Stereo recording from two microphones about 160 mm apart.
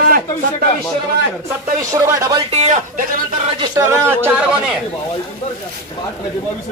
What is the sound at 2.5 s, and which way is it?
Speech, 45° right (ahead or behind).